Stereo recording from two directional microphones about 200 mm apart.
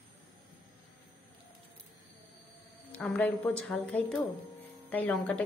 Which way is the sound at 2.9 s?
5° left (ahead or behind).